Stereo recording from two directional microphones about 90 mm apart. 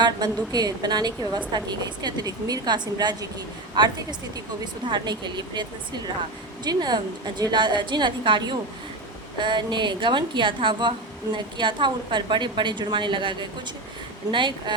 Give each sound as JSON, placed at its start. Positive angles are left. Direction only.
{"t": 0.2, "sound": "a woman's voice", "side_deg": -55}
{"t": 6.7, "sound": "a woman's voice", "side_deg": -50}